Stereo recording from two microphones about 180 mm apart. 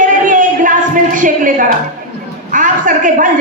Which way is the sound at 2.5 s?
45° right (ahead or behind).